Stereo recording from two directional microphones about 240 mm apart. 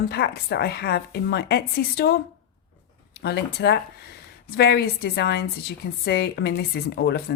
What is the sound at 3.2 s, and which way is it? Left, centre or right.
A woman's voice, left.